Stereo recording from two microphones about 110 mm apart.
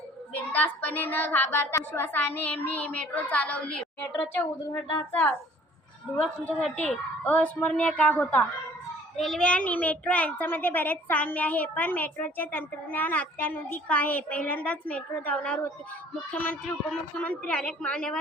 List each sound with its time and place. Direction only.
0.3 s a child's voice: 15° left (ahead or behind)
6.4 s a child's voice: 10° left (ahead or behind)